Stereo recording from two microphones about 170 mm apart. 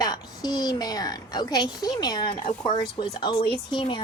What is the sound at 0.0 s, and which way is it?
A woman's voice, 25° left (ahead or behind).